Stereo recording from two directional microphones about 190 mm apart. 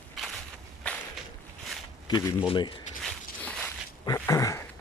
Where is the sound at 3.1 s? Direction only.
5° left (ahead or behind).